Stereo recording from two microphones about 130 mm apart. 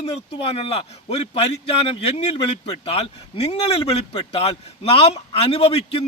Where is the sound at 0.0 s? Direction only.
50° left (ahead or behind).